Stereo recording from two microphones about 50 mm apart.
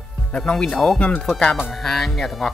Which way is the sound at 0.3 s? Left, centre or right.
Centre.